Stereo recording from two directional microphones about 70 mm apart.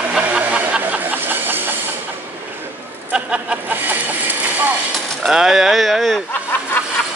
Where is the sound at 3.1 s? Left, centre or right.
Centre.